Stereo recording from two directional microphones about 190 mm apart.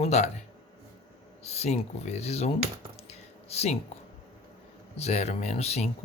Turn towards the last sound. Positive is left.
turn(degrees=35)  # may be behind; listen again after turning